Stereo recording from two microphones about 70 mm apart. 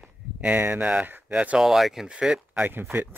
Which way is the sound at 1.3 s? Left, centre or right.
Centre.